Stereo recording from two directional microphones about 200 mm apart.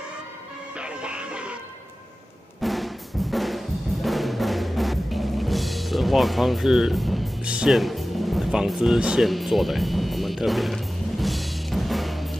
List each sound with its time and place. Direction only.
0.7 s music: 5° right (ahead or behind)
2.6 s music: centre (ahead or behind)